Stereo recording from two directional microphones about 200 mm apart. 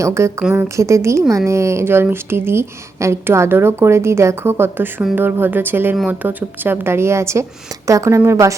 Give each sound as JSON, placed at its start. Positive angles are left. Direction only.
{"t": 0.0, "sound": "a woman's voice", "side_deg": -15}